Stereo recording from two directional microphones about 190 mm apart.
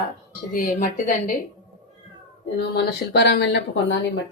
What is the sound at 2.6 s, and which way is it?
Speech, 60° left (ahead or behind).